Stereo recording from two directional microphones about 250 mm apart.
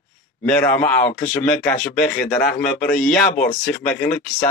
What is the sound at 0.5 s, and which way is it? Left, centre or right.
Speech, centre.